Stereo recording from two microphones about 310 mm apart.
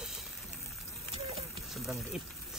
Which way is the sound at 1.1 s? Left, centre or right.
Centre.